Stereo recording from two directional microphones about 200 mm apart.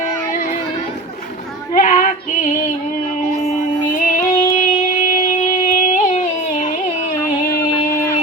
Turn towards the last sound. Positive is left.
turn(degrees=40)  # may be behind; listen again after turning